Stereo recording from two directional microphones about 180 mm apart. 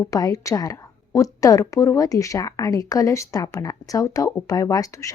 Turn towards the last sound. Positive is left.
turn(degrees=20)  # may be behind; listen again after turning